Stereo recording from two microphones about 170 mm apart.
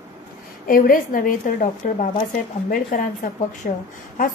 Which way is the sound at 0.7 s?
55° left (ahead or behind).